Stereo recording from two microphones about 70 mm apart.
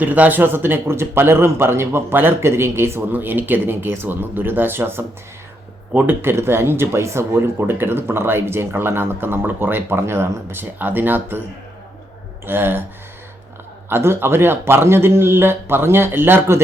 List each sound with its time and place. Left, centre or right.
0.0 s speech: right
12.5 s speech: right
13.9 s speech: right